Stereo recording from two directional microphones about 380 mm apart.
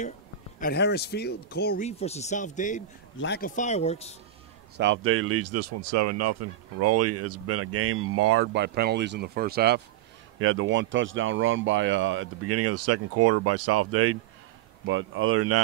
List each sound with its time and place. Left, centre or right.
0.6 s speech: left
4.7 s speech: right